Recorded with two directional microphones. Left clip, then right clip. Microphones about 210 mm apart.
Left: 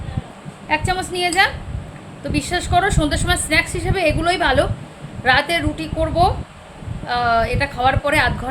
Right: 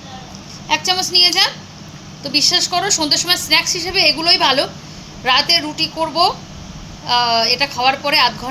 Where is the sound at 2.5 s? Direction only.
10° left (ahead or behind).